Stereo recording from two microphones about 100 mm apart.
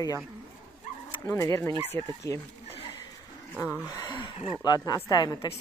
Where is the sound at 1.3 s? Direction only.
30° left (ahead or behind).